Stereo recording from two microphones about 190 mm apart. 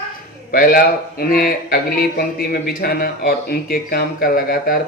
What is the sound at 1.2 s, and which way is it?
A man's voice, 50° left (ahead or behind).